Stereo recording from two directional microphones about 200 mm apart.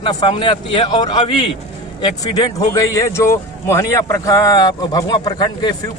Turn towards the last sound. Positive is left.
turn(degrees=20)  # may be behind; listen again after turning